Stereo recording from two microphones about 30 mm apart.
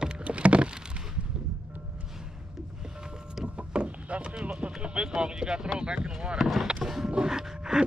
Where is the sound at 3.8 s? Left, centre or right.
Right.